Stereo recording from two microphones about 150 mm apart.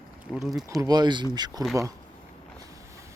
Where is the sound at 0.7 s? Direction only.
25° right (ahead or behind).